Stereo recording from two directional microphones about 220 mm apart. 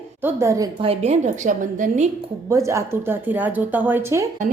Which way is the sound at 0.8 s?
30° right (ahead or behind).